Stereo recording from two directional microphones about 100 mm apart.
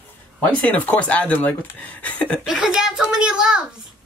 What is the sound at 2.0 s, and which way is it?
Chuckle, 15° left (ahead or behind).